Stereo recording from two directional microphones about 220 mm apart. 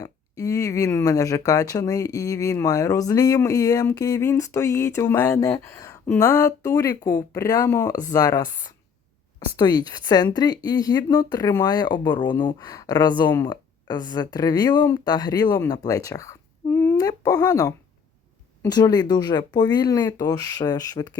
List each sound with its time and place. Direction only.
0.0 s speech: 15° left (ahead or behind)
16.6 s a sound: 10° left (ahead or behind)
18.6 s speech: 20° left (ahead or behind)